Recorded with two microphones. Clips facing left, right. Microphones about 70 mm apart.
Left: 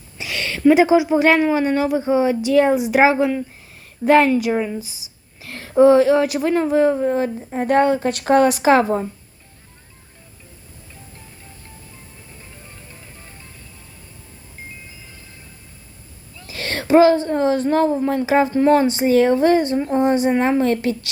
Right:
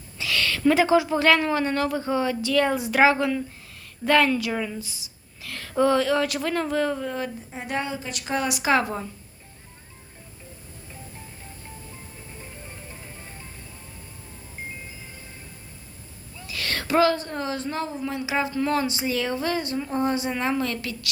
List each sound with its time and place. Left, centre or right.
0.2 s a woman's voice: left
16.5 s a woman's voice: left